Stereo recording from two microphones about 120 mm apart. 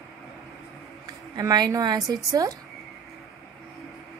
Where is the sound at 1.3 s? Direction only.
35° right (ahead or behind).